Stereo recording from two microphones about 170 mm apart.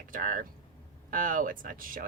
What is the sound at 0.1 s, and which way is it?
Speech, 50° right (ahead or behind).